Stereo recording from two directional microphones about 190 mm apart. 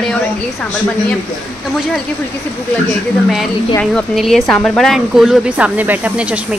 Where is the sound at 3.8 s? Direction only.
5° left (ahead or behind).